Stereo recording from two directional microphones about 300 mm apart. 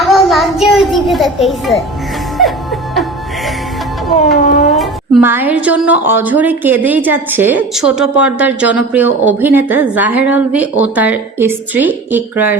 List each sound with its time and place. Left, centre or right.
0.0 s music: centre
4.1 s music: left
4.8 s a woman's voice: centre